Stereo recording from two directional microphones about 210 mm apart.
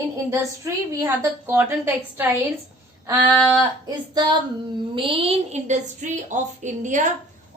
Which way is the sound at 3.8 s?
20° right (ahead or behind).